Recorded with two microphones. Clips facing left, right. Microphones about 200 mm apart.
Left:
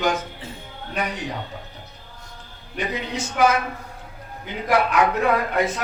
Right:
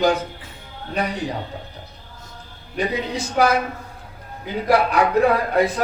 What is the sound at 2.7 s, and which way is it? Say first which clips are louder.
Speech: right 4 dB; 35° right (ahead or behind).